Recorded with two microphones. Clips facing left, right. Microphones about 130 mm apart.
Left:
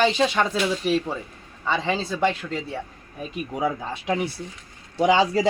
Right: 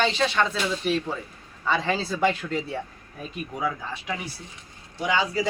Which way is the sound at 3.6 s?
25° left (ahead or behind).